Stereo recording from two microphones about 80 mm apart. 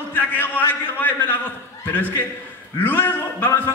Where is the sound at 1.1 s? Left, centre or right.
Left.